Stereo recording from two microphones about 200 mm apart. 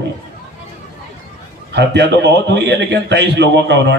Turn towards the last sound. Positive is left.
turn(degrees=-60)  # may be behind; listen again after turning